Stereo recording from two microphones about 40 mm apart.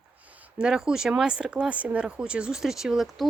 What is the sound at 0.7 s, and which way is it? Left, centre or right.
A woman's voice, centre.